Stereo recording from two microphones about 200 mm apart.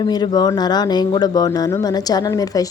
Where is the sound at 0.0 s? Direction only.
20° left (ahead or behind).